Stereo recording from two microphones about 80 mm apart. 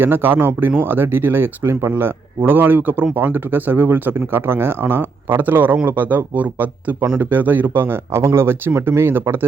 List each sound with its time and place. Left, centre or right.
0.0 s speech: right